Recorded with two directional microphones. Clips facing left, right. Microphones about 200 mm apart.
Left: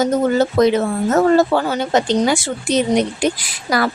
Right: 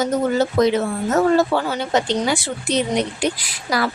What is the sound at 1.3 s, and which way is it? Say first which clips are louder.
Speech: left 3 dB; 45° left (ahead or behind).